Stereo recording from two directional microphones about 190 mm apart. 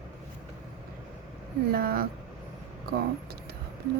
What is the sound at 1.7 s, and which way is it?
Speech, 55° right (ahead or behind).